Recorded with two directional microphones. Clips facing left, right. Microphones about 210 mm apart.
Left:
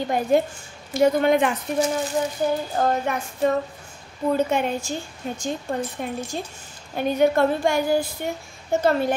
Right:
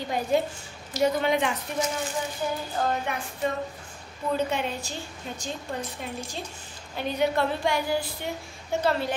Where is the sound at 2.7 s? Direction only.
45° left (ahead or behind).